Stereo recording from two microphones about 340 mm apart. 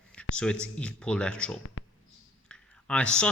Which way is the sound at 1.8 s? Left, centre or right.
Left.